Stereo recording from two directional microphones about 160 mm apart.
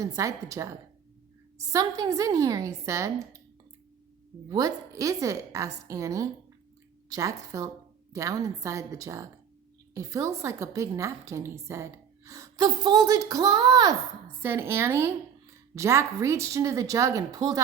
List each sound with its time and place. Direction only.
0.0 s a woman's voice: 20° right (ahead or behind)
4.4 s a woman's voice: 20° right (ahead or behind)